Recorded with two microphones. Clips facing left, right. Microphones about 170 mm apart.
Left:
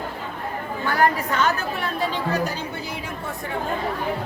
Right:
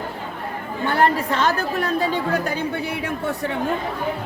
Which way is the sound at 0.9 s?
25° right (ahead or behind).